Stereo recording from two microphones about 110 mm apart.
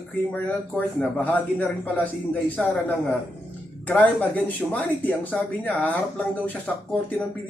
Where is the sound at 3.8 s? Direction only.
15° left (ahead or behind).